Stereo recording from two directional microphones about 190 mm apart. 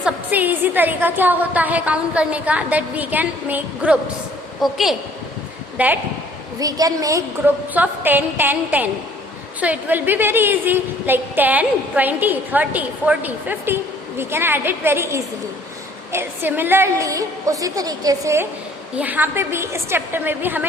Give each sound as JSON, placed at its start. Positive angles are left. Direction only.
{"t": 0.0, "sound": "a woman's voice", "side_deg": -10}
{"t": 6.6, "sound": "a woman's voice", "side_deg": -20}